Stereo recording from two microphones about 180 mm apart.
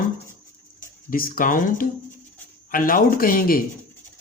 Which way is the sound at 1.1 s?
50° left (ahead or behind).